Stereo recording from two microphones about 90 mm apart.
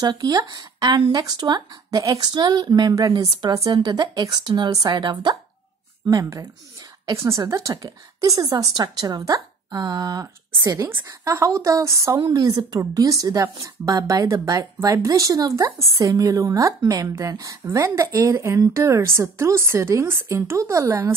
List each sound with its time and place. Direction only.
0.0 s speech: 45° right (ahead or behind)
3.5 s a woman's voice: 40° right (ahead or behind)
10.8 s a woman's voice: 30° right (ahead or behind)